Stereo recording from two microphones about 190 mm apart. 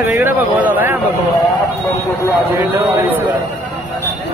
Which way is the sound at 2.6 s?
10° right (ahead or behind).